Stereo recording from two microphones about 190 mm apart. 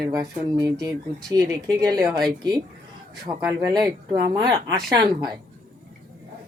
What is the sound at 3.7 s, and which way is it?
Speech, 20° right (ahead or behind).